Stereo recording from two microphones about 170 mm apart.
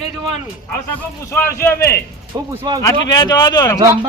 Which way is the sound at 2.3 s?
25° right (ahead or behind).